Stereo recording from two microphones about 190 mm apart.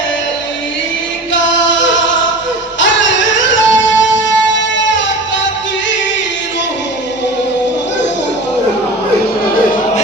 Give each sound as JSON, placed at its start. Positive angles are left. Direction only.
{"t": 2.8, "sound": "music", "side_deg": 75}